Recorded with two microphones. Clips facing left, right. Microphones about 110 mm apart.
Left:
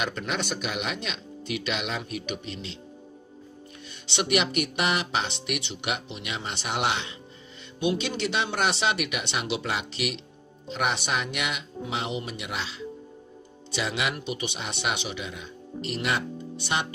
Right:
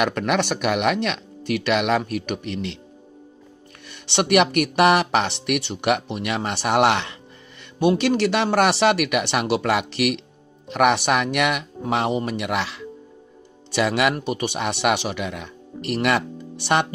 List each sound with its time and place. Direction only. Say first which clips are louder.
0.0 s speech: right 9 dB; 60° right (ahead or behind)
4.1 s speech: right 8 dB; 60° right (ahead or behind)